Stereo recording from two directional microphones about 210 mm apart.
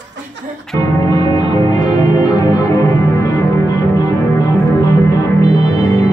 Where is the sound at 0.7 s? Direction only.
15° left (ahead or behind).